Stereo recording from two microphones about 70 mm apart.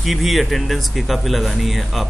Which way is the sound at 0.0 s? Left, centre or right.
Centre.